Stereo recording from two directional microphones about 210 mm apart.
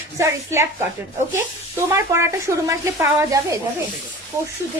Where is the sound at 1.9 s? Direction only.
15° right (ahead or behind).